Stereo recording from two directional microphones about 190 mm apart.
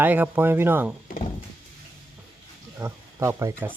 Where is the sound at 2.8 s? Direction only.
15° right (ahead or behind).